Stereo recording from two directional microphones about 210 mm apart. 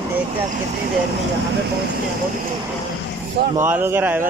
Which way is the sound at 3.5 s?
10° right (ahead or behind).